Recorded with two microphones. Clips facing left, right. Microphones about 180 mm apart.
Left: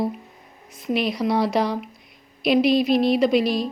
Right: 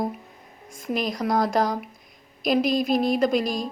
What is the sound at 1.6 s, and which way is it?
Speech, 45° right (ahead or behind).